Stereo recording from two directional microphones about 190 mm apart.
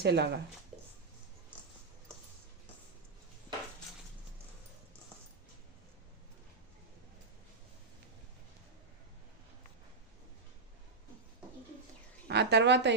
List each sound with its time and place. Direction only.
0.0 s a woman's voice: 60° right (ahead or behind)
12.3 s a woman's voice: 60° right (ahead or behind)